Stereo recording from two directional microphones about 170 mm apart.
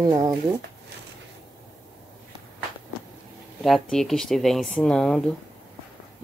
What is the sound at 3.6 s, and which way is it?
Speech, centre (ahead or behind).